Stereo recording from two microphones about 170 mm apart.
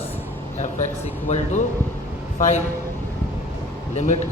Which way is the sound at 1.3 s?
40° left (ahead or behind).